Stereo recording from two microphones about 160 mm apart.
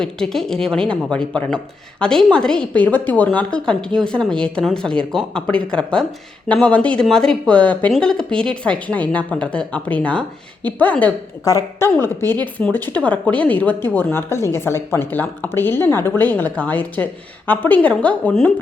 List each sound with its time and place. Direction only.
0.0 s a woman's voice: 5° left (ahead or behind)